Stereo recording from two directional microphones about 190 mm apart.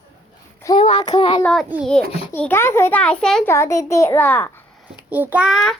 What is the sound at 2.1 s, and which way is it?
Speech, 30° left (ahead or behind).